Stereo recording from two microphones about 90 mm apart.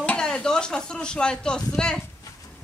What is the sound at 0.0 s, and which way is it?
Speech, 10° left (ahead or behind).